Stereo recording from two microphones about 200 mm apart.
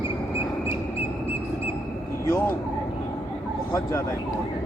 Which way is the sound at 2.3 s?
10° left (ahead or behind).